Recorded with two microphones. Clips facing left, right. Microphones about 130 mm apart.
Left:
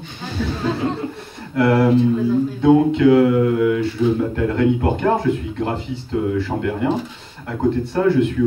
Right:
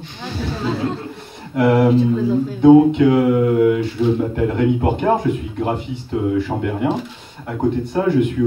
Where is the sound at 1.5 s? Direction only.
20° right (ahead or behind).